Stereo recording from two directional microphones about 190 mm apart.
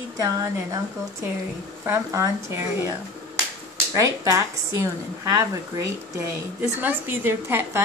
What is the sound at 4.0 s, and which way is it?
A woman's voice, 15° right (ahead or behind).